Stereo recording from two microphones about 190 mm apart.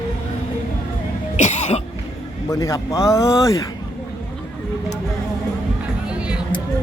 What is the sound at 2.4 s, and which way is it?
A man's voice, 15° left (ahead or behind).